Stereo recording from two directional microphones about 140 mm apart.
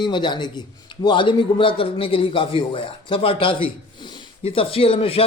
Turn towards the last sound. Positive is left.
turn(degrees=40)  # may be behind; listen again after turning